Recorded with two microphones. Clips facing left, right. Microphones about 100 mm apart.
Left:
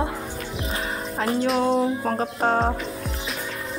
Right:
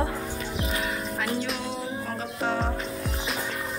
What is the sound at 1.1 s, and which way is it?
Music, 35° left (ahead or behind).